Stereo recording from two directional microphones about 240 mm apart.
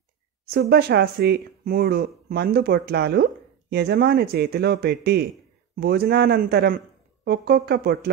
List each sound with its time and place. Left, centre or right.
0.5 s speech: right